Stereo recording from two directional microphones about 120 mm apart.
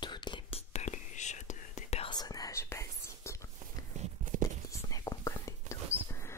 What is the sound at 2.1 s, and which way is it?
Whispering, 35° left (ahead or behind).